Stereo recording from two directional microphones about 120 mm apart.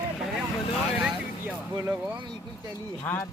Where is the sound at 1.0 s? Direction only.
5° right (ahead or behind).